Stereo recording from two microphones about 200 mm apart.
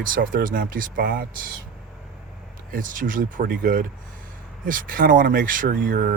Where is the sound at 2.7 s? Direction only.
40° right (ahead or behind).